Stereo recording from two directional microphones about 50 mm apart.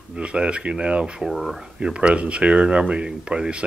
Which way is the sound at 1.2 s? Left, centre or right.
Centre.